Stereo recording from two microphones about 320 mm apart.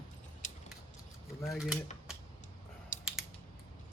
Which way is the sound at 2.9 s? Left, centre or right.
Left.